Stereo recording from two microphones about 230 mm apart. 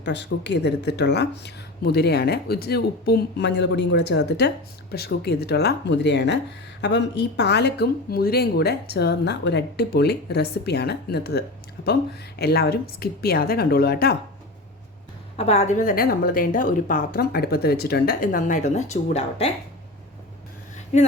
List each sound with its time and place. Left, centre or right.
0.0 s a woman's voice: left
15.4 s a woman's voice: left